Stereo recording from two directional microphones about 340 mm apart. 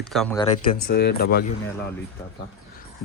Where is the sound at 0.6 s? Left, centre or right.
Left.